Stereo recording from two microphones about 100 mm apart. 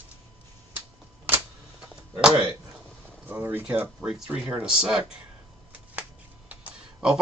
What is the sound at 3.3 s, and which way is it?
Speech, 20° right (ahead or behind).